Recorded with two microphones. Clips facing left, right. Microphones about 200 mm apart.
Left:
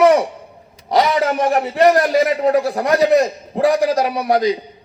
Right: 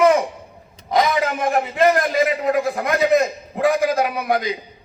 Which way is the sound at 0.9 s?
35° left (ahead or behind).